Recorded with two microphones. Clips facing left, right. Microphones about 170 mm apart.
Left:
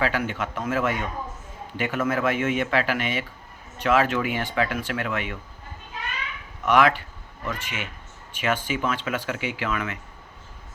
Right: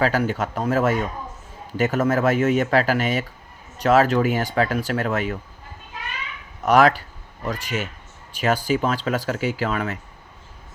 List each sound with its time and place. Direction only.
0.0 s speech: 40° right (ahead or behind)
6.7 s speech: 40° right (ahead or behind)